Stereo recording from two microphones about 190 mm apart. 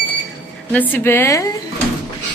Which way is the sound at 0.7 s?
10° left (ahead or behind).